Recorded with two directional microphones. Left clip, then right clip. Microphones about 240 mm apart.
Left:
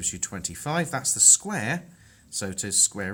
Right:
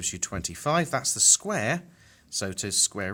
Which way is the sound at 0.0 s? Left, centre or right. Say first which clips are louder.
Even; right.